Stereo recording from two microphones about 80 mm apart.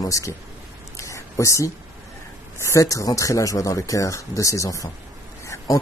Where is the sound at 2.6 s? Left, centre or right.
Left.